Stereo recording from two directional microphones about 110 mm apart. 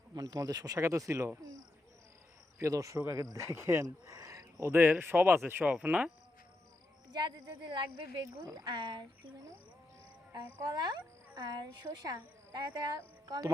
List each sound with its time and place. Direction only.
0.1 s speech: 35° right (ahead or behind)
2.6 s speech: 30° right (ahead or behind); by 6.1 s 10° right (ahead or behind)
7.1 s speech: 40° right (ahead or behind)
10.6 s speech: 40° right (ahead or behind)